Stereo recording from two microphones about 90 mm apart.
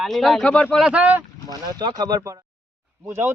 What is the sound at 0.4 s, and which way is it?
Speech, 10° left (ahead or behind).